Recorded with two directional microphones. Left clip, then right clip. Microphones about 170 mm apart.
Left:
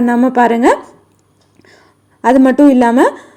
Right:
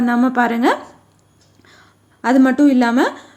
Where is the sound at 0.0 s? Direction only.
15° left (ahead or behind).